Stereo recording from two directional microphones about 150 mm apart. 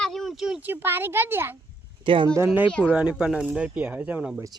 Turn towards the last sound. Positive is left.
turn(degrees=-10)  # may be behind; listen again after turning